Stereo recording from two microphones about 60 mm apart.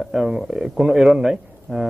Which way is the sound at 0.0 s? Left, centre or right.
Centre.